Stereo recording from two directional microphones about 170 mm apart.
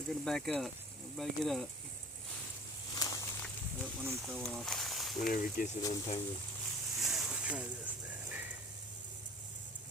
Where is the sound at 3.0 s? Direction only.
20° left (ahead or behind).